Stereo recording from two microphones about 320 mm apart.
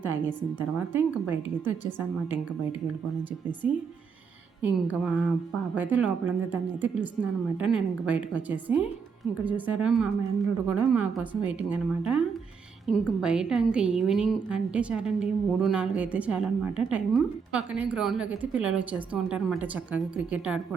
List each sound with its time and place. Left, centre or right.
0.0 s a woman's voice: centre
3.6 s speech: centre
4.6 s a woman's voice: centre